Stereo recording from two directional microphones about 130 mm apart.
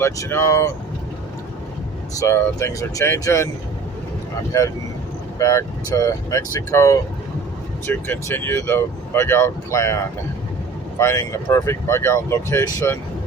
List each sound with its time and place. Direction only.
0.0 s speech: 20° left (ahead or behind)
2.1 s speech: 20° left (ahead or behind)
5.4 s speech: 25° left (ahead or behind)